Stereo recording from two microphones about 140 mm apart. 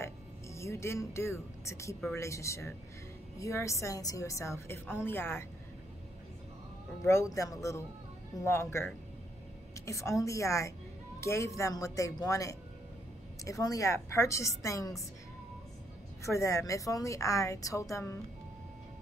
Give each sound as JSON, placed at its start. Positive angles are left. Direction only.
{"t": 0.0, "sound": "a woman's voice", "side_deg": 20}
{"t": 7.1, "sound": "a woman's voice", "side_deg": 20}
{"t": 16.3, "sound": "a woman's voice", "side_deg": 20}